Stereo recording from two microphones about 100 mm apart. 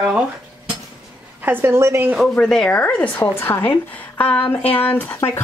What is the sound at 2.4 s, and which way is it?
A woman's voice, 5° left (ahead or behind).